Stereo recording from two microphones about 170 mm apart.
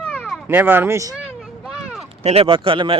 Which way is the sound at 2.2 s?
35° right (ahead or behind).